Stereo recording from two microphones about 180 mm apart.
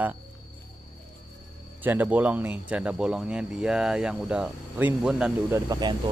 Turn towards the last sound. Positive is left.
turn(degrees=-20)  # may be behind; listen again after turning